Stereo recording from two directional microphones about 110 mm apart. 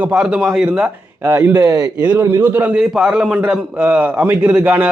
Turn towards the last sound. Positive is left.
turn(degrees=-15)  # may be behind; listen again after turning